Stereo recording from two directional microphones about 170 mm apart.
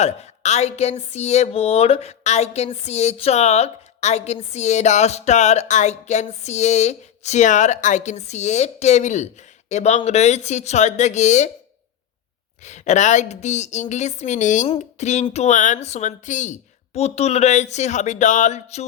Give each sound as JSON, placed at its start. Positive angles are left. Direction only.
{"t": 0.0, "sound": "speech", "side_deg": 40}
{"t": 12.6, "sound": "a woman's voice", "side_deg": 45}